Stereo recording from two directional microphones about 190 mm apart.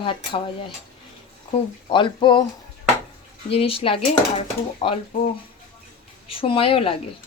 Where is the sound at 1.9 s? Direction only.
25° left (ahead or behind).